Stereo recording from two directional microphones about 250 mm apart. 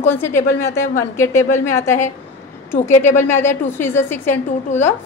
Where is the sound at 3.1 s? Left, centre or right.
Centre.